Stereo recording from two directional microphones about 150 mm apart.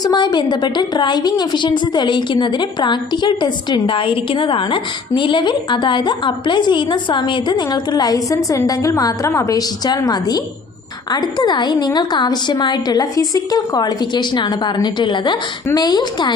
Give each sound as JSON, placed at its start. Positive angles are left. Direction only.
{"t": 0.0, "sound": "a woman's voice", "side_deg": 30}